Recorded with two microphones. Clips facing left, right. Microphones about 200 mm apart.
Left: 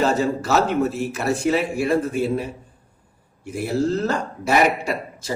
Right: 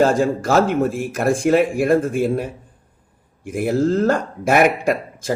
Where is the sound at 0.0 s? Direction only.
50° right (ahead or behind).